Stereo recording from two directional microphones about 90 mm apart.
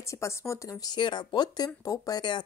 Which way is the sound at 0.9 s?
60° left (ahead or behind).